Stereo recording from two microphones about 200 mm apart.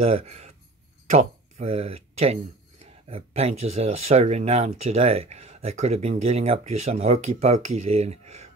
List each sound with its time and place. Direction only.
0.0 s speech: 30° right (ahead or behind)